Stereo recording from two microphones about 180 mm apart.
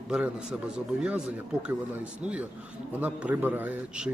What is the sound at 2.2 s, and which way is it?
Speech, 5° right (ahead or behind).